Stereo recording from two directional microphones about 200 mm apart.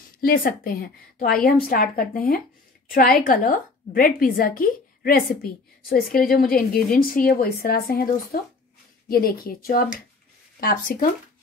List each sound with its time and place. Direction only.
0.2 s a woman's voice: 45° left (ahead or behind)